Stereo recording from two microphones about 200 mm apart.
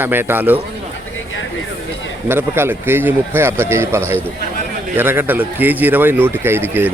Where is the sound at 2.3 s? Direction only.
10° right (ahead or behind).